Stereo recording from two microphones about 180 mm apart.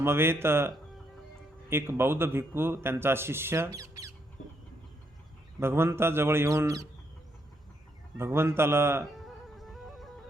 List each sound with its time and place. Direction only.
0.0 s a man's voice: 15° right (ahead or behind)
1.7 s a man's voice: 15° right (ahead or behind)
5.5 s a man's voice: 15° right (ahead or behind)
8.2 s a man's voice: 15° right (ahead or behind)
9.1 s music: centre (ahead or behind)